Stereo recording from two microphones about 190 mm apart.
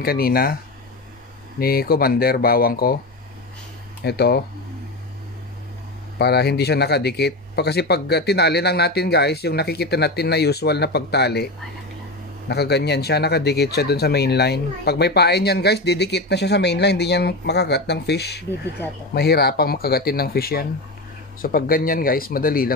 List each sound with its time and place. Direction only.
0.0 s speech: 55° left (ahead or behind)
1.6 s speech: 55° left (ahead or behind)
4.0 s speech: 60° left (ahead or behind)
6.1 s speech: 60° left (ahead or behind)
12.4 s speech: 60° left (ahead or behind)